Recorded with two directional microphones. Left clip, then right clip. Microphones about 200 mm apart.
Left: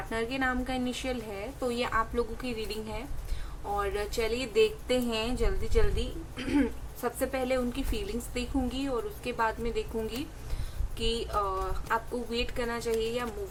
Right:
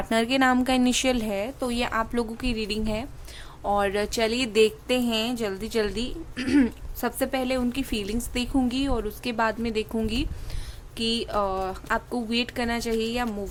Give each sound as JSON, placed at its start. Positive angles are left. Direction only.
{"t": 0.1, "sound": "a woman's voice", "side_deg": -50}